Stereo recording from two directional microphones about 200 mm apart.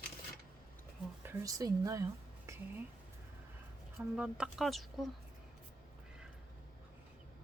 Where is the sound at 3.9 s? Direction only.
5° right (ahead or behind).